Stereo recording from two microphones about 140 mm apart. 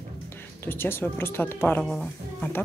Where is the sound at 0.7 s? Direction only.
15° left (ahead or behind).